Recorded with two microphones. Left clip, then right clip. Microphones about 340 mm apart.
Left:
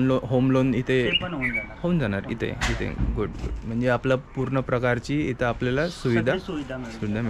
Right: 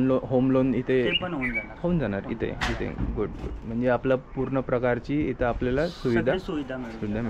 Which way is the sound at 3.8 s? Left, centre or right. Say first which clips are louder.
Left 1 dB; centre.